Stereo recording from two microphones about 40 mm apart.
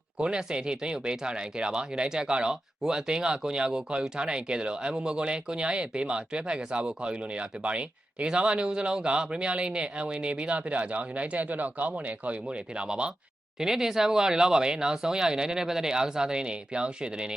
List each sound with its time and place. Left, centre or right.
0.2 s speech: right
13.6 s speech: centre